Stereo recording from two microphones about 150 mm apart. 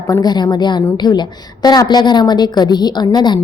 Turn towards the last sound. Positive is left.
turn(degrees=30)  # may be behind; listen again after turning